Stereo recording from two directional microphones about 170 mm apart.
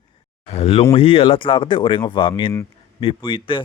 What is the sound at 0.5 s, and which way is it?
A man's voice, 40° left (ahead or behind).